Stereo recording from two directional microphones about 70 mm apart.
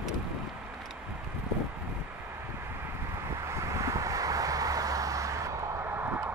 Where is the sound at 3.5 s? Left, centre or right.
Right.